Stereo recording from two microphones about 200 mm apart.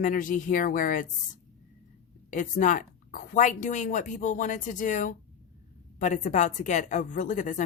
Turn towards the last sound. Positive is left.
turn(degrees=40)  # may be behind; listen again after turning